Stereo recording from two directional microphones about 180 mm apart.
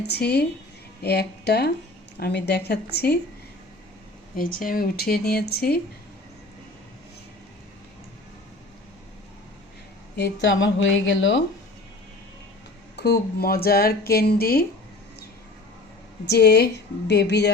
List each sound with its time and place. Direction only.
0.1 s speech: 65° left (ahead or behind)
4.4 s speech: 50° left (ahead or behind)
10.2 s speech: 75° left (ahead or behind)
13.0 s speech: 60° left (ahead or behind)
16.2 s a woman's voice: 65° left (ahead or behind)